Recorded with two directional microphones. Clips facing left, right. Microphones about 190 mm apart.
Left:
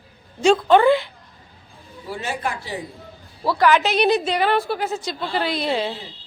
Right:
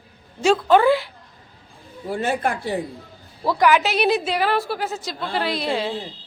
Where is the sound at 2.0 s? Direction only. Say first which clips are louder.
Right 5 dB; 55° right (ahead or behind).